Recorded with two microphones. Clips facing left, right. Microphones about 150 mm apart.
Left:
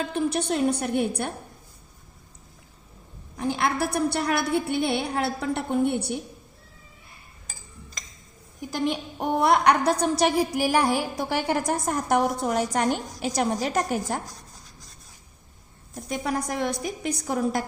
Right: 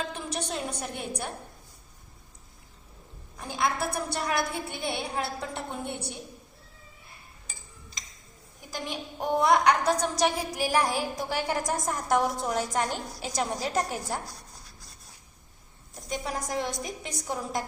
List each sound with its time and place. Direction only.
0.1 s a woman's voice: 60° left (ahead or behind)
3.3 s a woman's voice: 70° left (ahead or behind)
8.7 s a woman's voice: 60° left (ahead or behind)
16.1 s a woman's voice: 60° left (ahead or behind)